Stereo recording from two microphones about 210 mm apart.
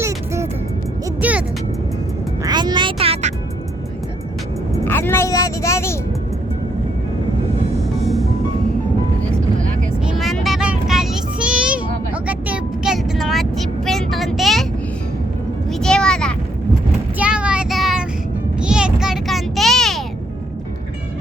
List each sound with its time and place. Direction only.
1.2 s vehicle: 5° right (ahead or behind)
2.4 s music: 20° right (ahead or behind)
4.9 s vehicle: 10° left (ahead or behind)
8.0 s music: centre (ahead or behind)
10.0 s child singing: centre (ahead or behind)
15.7 s vehicle: 5° left (ahead or behind)
17.2 s child singing: 5° right (ahead or behind)
18.6 s a sound: 5° right (ahead or behind)